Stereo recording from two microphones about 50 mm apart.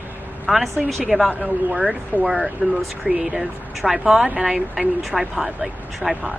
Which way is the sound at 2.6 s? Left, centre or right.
Centre.